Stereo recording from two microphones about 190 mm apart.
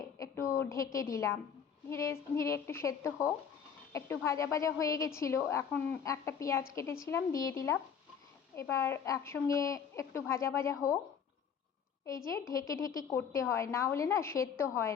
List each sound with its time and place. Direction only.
0.2 s a sound: 15° left (ahead or behind)
1.1 s a woman's voice: 15° left (ahead or behind)
12.0 s a woman's voice: 15° left (ahead or behind)